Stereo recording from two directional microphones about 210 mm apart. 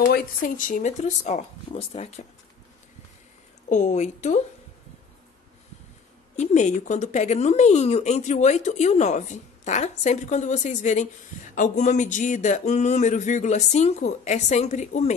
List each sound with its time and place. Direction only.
0.0 s speech: 45° left (ahead or behind)
3.6 s speech: 35° left (ahead or behind)
6.3 s speech: 35° left (ahead or behind)